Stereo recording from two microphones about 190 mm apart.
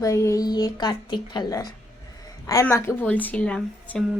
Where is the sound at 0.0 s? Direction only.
15° left (ahead or behind).